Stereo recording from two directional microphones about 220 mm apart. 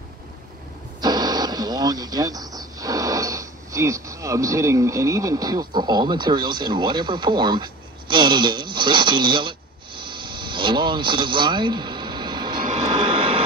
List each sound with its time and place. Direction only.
1.0 s speech: 20° right (ahead or behind)
12.9 s vehicle: 25° right (ahead or behind)